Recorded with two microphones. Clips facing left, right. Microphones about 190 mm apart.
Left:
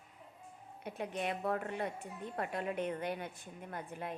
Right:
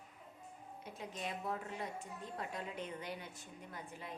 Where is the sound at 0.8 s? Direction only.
65° left (ahead or behind).